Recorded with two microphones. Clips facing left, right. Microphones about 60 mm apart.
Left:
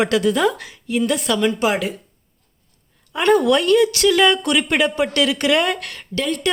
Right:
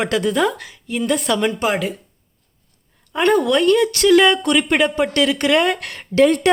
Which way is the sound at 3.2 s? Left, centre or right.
Centre.